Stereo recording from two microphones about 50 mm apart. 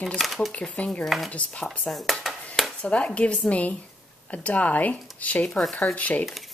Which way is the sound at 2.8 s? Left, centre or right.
Left.